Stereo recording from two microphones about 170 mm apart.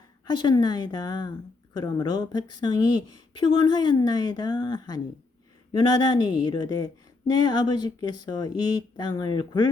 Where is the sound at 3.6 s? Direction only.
25° left (ahead or behind).